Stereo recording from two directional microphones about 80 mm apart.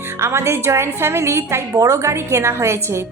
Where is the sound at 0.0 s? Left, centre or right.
Right.